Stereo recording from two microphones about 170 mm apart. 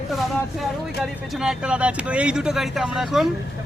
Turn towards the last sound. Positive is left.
turn(degrees=0)  # may be behind; listen again after turning